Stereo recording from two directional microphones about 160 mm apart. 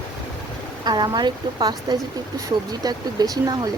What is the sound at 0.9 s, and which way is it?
Speech, 25° right (ahead or behind).